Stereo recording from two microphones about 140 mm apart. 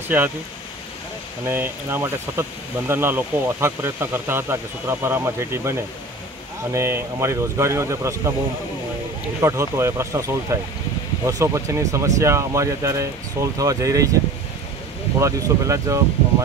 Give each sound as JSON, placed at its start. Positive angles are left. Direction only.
{"t": 0.1, "sound": "speech", "side_deg": -15}
{"t": 1.4, "sound": "speech", "side_deg": -15}
{"t": 9.4, "sound": "speech", "side_deg": -20}
{"t": 15.1, "sound": "speech", "side_deg": -25}